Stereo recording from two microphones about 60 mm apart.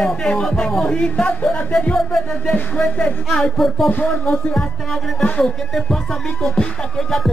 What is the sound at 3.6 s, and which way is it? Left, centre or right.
Music, centre.